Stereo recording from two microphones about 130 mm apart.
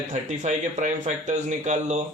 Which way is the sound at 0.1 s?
65° right (ahead or behind).